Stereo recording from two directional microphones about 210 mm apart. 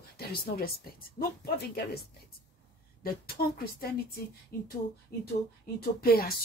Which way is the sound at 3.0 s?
45° left (ahead or behind).